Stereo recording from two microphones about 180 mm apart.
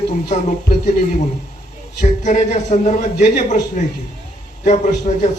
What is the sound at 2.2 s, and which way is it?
A man's voice, 40° left (ahead or behind).